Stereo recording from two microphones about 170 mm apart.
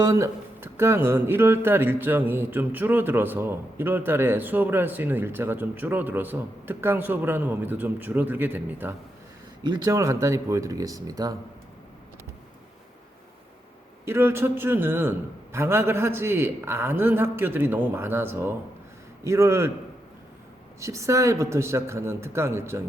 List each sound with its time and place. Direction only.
0.0 s speech: 20° right (ahead or behind)
9.6 s speech: 20° right (ahead or behind)
14.0 s speech: 15° right (ahead or behind)
20.8 s speech: 15° right (ahead or behind)